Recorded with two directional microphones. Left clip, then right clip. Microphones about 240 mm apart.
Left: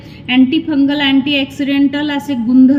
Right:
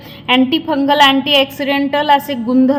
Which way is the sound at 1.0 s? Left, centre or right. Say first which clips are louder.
Right 4 dB; right.